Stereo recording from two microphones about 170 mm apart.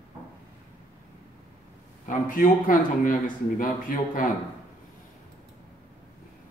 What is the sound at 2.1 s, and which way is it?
A man's voice, 55° left (ahead or behind).